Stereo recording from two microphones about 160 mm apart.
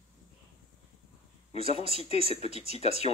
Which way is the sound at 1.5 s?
40° left (ahead or behind).